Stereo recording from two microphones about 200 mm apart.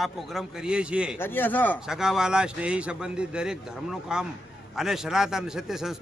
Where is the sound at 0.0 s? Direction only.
Centre (ahead or behind).